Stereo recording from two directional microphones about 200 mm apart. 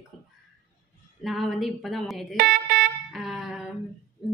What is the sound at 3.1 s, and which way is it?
Music, 5° right (ahead or behind).